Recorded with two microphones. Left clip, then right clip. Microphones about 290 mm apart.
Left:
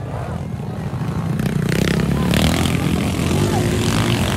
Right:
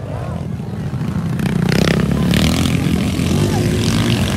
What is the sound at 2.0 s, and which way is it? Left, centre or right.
Vehicle, centre.